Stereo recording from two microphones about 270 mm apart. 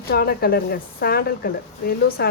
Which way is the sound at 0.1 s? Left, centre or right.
Left.